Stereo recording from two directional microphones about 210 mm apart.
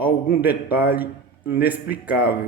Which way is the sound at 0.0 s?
10° right (ahead or behind).